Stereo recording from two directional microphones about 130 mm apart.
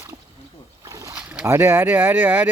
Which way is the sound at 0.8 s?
25° right (ahead or behind).